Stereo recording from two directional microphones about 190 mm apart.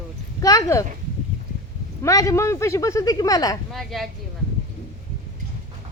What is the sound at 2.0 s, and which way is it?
Speech, 15° left (ahead or behind).